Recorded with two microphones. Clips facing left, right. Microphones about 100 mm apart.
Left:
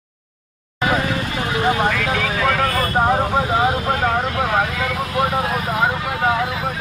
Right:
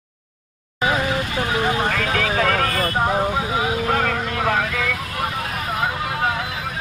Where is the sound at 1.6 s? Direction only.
25° left (ahead or behind).